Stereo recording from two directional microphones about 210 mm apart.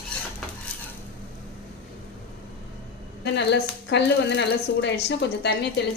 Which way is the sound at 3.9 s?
55° left (ahead or behind).